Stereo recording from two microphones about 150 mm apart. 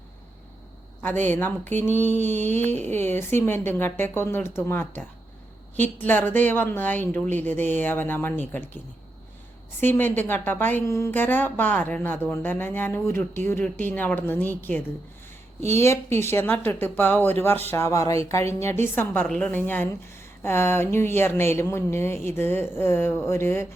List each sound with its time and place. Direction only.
1.2 s speech: 15° left (ahead or behind)
9.8 s speech: 15° left (ahead or behind)